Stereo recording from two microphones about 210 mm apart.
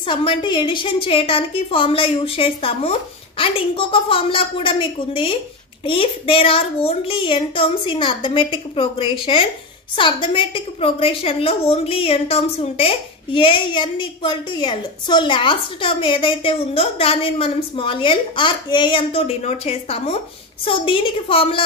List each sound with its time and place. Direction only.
0.0 s a woman's voice: 25° left (ahead or behind)